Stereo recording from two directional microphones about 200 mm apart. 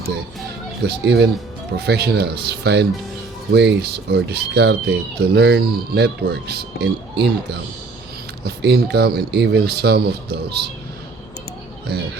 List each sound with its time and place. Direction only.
0.9 s speech: 55° right (ahead or behind)